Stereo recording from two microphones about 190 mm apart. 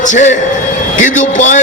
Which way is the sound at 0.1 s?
40° left (ahead or behind).